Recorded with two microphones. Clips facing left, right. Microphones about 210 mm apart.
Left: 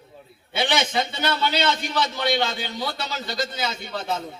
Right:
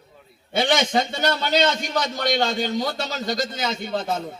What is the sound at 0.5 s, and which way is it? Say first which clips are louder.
A man's voice: right 3 dB; 45° right (ahead or behind).